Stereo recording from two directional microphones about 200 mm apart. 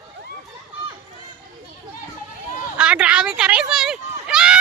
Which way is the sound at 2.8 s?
5° right (ahead or behind).